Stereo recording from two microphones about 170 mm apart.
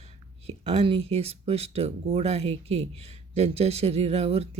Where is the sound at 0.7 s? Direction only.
35° right (ahead or behind).